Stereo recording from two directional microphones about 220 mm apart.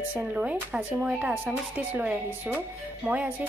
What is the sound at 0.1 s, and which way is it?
Speech, 5° right (ahead or behind).